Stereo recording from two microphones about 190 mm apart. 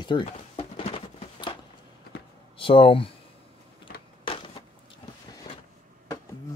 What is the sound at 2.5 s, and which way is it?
Speech, 30° left (ahead or behind).